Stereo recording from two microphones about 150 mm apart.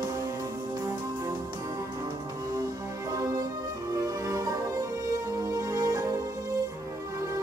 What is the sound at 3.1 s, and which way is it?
Music, 20° right (ahead or behind).